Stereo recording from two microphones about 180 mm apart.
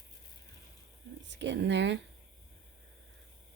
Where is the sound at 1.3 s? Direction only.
75° right (ahead or behind).